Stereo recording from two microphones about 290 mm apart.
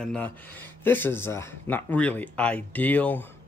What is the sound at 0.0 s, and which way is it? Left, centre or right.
Speech, centre.